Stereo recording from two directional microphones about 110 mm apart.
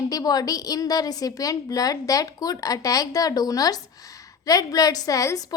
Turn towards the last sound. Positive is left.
turn(degrees=30)  # may be behind; listen again after turning